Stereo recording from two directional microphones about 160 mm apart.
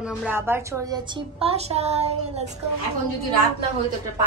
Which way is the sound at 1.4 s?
40° right (ahead or behind).